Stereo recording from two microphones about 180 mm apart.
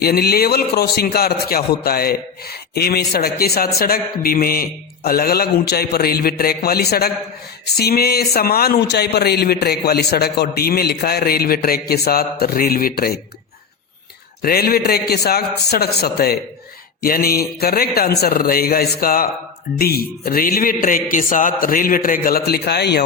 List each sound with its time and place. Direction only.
0.0 s a man's voice: 60° left (ahead or behind)
14.4 s a man's voice: 60° left (ahead or behind)